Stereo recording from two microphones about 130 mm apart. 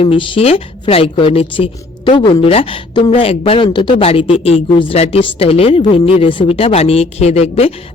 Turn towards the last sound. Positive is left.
turn(degrees=55)  # may be behind; listen again after turning